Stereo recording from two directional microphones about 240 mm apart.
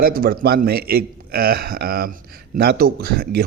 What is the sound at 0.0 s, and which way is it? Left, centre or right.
A man's voice, right.